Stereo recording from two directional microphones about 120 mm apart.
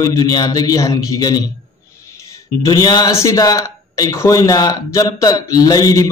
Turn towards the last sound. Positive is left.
turn(degrees=30)  # may be behind; listen again after turning